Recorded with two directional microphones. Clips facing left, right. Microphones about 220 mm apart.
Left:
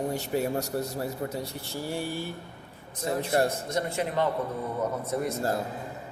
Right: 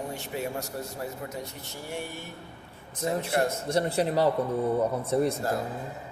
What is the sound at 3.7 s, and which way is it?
Speech, 35° right (ahead or behind).